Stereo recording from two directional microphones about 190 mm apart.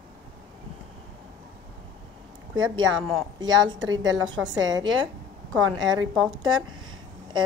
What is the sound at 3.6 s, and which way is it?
A woman's voice, 20° right (ahead or behind).